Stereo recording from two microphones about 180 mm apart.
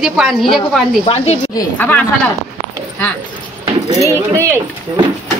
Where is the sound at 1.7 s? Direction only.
10° left (ahead or behind).